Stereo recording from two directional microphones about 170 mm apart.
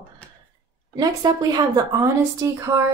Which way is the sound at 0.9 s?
25° right (ahead or behind).